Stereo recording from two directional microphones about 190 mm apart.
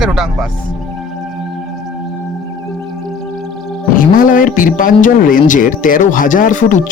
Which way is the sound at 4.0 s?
45° left (ahead or behind).